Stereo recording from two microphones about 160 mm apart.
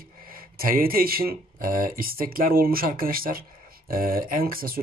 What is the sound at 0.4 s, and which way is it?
Speech, 65° right (ahead or behind).